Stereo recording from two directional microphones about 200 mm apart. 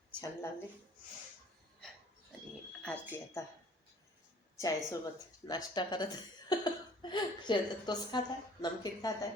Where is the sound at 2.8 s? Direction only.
10° left (ahead or behind).